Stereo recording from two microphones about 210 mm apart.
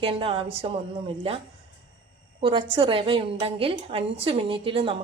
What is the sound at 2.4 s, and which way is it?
A woman's voice, 25° right (ahead or behind).